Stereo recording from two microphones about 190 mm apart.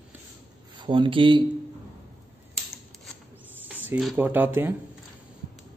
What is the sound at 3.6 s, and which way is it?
Speech, 10° right (ahead or behind).